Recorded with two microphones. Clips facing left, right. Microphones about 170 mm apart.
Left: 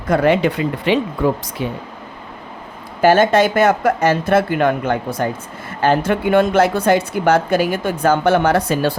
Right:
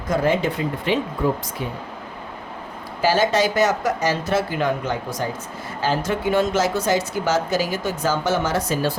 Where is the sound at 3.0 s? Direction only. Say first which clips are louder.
Left 6 dB; 55° left (ahead or behind).